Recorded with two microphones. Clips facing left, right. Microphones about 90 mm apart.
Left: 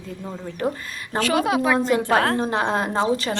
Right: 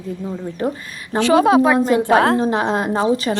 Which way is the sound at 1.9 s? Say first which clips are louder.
Right 5 dB; 20° right (ahead or behind).